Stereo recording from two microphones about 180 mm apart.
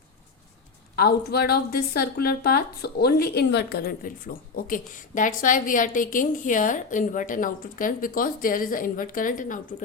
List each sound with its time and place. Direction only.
0.9 s speech: 60° left (ahead or behind)